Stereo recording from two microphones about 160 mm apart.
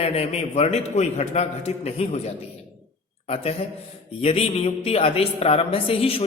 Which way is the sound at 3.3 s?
40° left (ahead or behind).